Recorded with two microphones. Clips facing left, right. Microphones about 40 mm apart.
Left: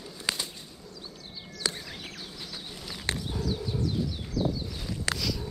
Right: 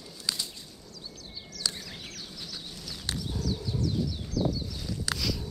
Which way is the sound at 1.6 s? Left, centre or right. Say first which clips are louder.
Left 2 dB; left.